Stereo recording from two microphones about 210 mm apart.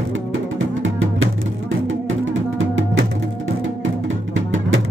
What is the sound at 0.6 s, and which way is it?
Music, 70° right (ahead or behind).